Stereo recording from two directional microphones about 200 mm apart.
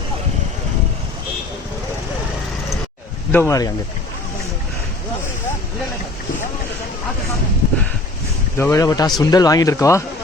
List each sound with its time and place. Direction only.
3.3 s speech: 15° left (ahead or behind)
8.5 s speech: 15° left (ahead or behind)